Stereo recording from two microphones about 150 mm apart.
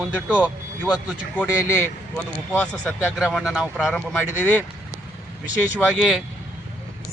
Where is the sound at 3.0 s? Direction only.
5° right (ahead or behind).